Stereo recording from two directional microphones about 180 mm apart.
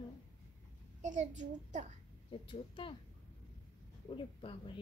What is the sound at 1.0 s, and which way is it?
Speech, 40° right (ahead or behind).